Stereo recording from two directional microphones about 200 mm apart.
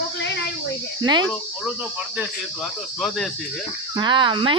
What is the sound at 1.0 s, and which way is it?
Speech, 20° right (ahead or behind).